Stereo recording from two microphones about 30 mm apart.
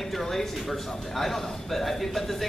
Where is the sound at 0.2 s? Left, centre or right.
Centre.